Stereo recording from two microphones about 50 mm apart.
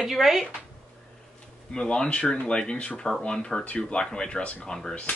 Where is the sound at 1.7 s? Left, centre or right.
Centre.